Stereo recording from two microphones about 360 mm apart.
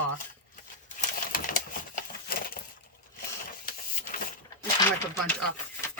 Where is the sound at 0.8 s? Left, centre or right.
Left.